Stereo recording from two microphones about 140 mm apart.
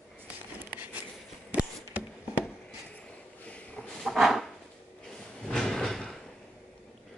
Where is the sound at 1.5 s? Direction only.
10° right (ahead or behind).